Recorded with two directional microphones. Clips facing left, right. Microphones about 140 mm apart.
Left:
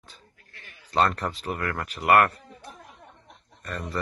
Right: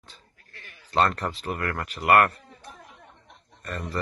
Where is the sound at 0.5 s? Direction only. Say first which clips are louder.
Right 2 dB; 15° left (ahead or behind).